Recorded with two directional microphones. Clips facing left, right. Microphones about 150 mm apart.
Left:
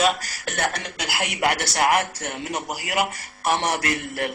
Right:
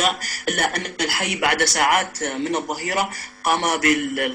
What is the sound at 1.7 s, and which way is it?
Speech, 25° left (ahead or behind).